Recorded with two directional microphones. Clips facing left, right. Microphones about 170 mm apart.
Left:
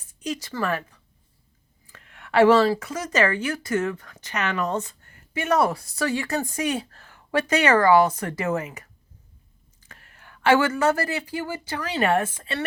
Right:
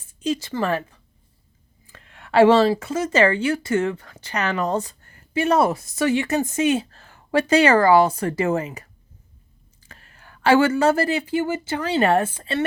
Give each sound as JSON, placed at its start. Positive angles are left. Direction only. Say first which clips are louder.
{"t": 0.1, "sound": "speech", "louder": "right 6 dB", "side_deg": -25}